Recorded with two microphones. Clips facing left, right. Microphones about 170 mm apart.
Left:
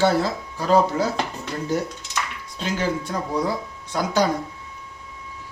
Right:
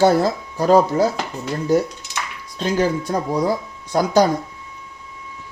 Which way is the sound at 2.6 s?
40° right (ahead or behind).